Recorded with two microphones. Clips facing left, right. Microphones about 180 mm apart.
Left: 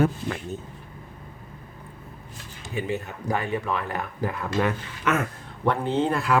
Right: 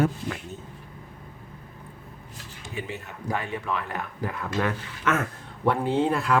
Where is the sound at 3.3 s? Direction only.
40° left (ahead or behind).